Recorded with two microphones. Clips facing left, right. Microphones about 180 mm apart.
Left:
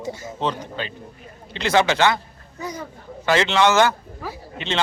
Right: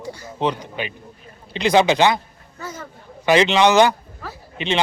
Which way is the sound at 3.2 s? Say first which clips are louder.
Right 3 dB; 15° right (ahead or behind).